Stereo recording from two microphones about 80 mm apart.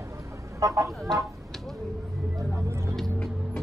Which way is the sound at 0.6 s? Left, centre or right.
Right.